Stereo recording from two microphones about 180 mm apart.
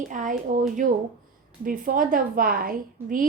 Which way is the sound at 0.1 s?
45° right (ahead or behind).